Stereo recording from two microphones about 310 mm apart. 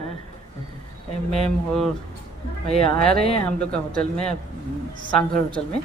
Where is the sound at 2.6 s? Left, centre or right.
Centre.